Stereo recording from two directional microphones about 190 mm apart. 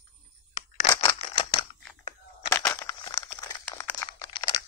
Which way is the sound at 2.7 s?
20° left (ahead or behind).